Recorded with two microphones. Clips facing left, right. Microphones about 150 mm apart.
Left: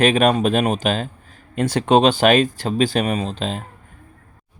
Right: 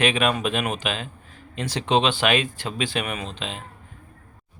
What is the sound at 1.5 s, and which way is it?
Speech, 50° left (ahead or behind).